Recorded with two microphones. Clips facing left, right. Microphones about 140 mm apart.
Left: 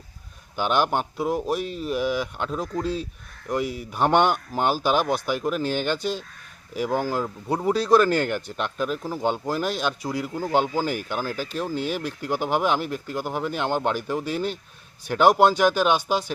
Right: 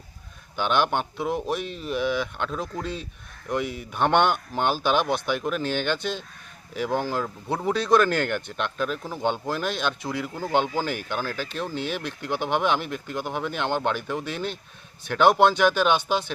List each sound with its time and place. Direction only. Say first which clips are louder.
0.5 s speech: left 1 dB; 5° left (ahead or behind)
6.0 s speech: left 2 dB; 40° left (ahead or behind)
6.7 s speech: left 1 dB; 5° left (ahead or behind)
11.7 s speech: left 3 dB; 40° left (ahead or behind)
12.4 s speech: left 1 dB; 5° left (ahead or behind)
12.8 s speech: left 3 dB; 40° left (ahead or behind)
13.1 s speech: left 1 dB; 5° left (ahead or behind)
15.4 s speech: left 1 dB; 40° left (ahead or behind)
15.7 s speech: left 1 dB; 5° left (ahead or behind)